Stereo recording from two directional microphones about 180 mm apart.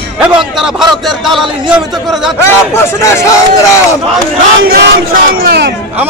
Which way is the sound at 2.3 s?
15° left (ahead or behind).